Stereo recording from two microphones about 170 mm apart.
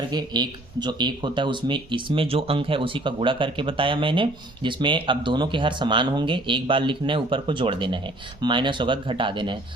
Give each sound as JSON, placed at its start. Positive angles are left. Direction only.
{"t": 0.1, "sound": "speech", "side_deg": -25}